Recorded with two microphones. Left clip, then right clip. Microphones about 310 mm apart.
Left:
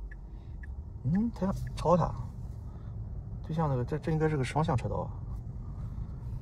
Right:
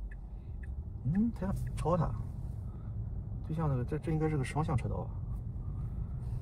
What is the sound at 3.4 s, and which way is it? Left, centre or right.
A man's voice, left.